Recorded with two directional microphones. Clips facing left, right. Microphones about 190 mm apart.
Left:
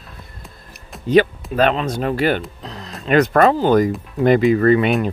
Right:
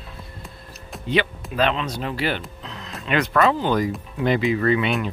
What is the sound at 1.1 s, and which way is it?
Speech, 40° left (ahead or behind).